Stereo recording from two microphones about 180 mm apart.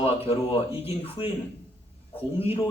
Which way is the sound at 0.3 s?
30° left (ahead or behind).